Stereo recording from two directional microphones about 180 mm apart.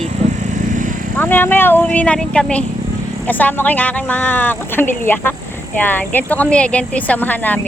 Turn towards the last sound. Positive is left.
turn(degrees=10)  # may be behind; listen again after turning